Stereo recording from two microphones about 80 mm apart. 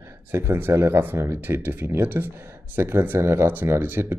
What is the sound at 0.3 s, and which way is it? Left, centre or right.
Speech, right.